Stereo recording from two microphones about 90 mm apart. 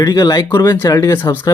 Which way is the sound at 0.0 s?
45° left (ahead or behind).